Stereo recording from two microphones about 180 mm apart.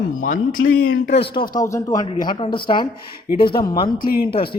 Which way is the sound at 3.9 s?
55° left (ahead or behind).